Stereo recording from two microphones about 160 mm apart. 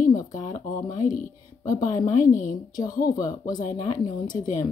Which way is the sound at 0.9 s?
55° left (ahead or behind).